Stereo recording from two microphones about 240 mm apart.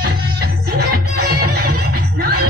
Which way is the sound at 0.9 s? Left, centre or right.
Right.